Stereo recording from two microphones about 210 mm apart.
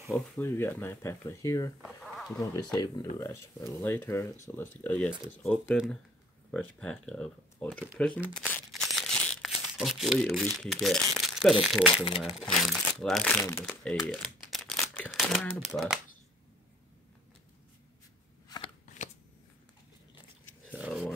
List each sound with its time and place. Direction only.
0.1 s speech: 10° left (ahead or behind)
1.8 s a sound: centre (ahead or behind)
2.3 s speech: 15° left (ahead or behind)
8.4 s crumpling: 5° left (ahead or behind)
10.6 s speech: centre (ahead or behind)
13.4 s speech: 15° left (ahead or behind)
13.7 s typewriter: centre (ahead or behind)
19.0 s shuffling cards: 35° left (ahead or behind)
20.7 s a sound: centre (ahead or behind)